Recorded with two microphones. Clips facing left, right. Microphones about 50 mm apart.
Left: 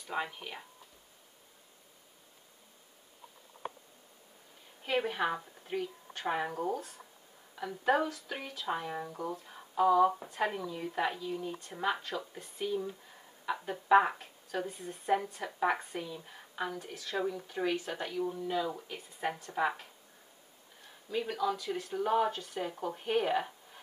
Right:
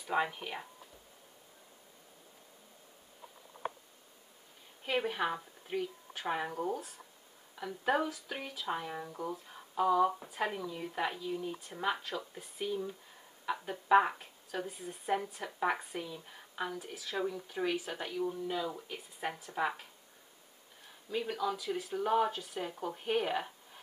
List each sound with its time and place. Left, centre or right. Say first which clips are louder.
0.0 s speech: right 4 dB; centre
4.8 s a woman's voice: left 1 dB; centre